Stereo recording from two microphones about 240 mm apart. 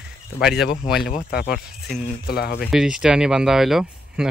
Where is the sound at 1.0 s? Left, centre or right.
Left.